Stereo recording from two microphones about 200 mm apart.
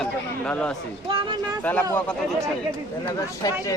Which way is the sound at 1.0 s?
25° right (ahead or behind).